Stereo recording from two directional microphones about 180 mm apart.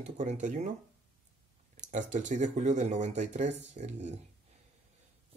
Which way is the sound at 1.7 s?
45° right (ahead or behind).